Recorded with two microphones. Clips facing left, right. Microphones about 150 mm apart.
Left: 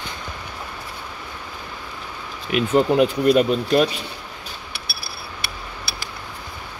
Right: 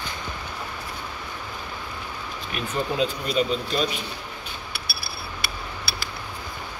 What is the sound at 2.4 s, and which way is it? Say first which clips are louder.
Speech: left 10 dB; 70° left (ahead or behind).